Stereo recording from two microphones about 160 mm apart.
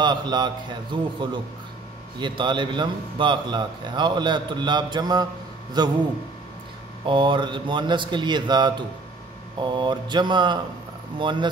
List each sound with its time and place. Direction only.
0.0 s a man's voice: 25° right (ahead or behind)
7.1 s a man's voice: 30° right (ahead or behind)